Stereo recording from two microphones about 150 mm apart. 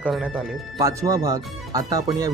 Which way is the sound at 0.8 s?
25° right (ahead or behind).